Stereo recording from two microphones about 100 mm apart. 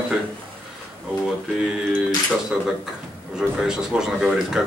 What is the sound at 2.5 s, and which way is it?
A man's voice, 5° right (ahead or behind).